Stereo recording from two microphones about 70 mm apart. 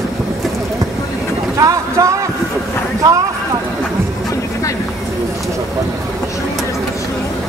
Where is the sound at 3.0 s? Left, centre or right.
Right.